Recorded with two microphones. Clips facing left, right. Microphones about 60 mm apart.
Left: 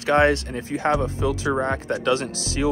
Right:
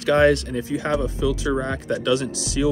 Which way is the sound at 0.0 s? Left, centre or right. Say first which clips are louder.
Right 1 dB; left.